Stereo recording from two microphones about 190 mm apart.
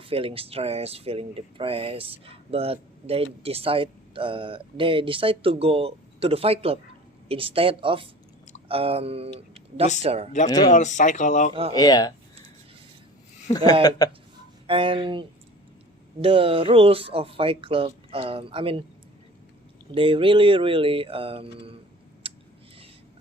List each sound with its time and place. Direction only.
0.0 s speech: 30° right (ahead or behind)
10.7 s speech: 40° left (ahead or behind)
11.7 s speech: 20° left (ahead or behind)
14.0 s speech: 20° left (ahead or behind)
14.7 s speech: 25° right (ahead or behind)
19.9 s speech: 25° right (ahead or behind)
22.2 s a sound: 30° right (ahead or behind)